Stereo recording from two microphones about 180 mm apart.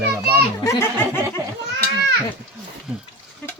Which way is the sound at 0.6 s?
15° left (ahead or behind).